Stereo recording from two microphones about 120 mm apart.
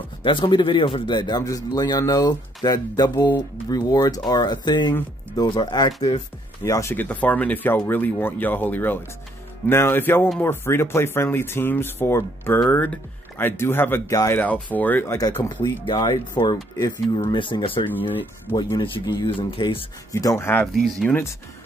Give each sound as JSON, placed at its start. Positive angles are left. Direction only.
{"t": 0.2, "sound": "a man's voice", "side_deg": 40}
{"t": 6.6, "sound": "speech", "side_deg": 25}
{"t": 14.4, "sound": "speech", "side_deg": 15}
{"t": 15.4, "sound": "a man's voice", "side_deg": 40}
{"t": 18.8, "sound": "a man's voice", "side_deg": 35}
{"t": 19.3, "sound": "speech", "side_deg": 50}
{"t": 20.1, "sound": "speech", "side_deg": 30}
{"t": 20.6, "sound": "speech", "side_deg": 5}
{"t": 21.1, "sound": "speech", "side_deg": 20}